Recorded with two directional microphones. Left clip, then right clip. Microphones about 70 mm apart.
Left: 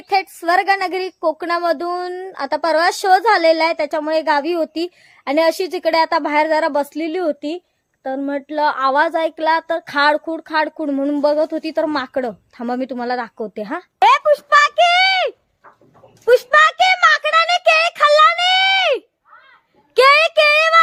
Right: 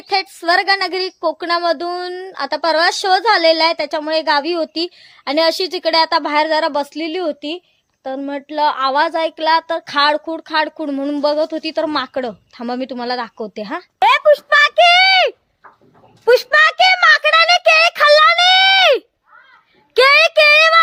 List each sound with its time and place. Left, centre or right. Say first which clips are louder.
0.1 s a woman's voice: right 1 dB; left
14.0 s speech: right 1 dB; centre
16.2 s a child's voice: even; right
19.9 s a child's voice: right 1 dB; right